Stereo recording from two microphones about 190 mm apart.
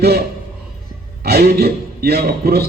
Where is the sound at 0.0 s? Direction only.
55° right (ahead or behind).